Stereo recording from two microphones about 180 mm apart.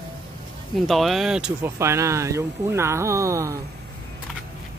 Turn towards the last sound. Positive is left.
turn(degrees=-15)  # may be behind; listen again after turning